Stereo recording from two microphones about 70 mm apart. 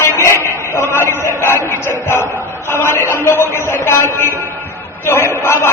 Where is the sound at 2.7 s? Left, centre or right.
Left.